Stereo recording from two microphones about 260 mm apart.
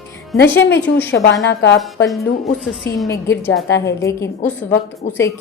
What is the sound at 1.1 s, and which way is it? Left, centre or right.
Speech, left.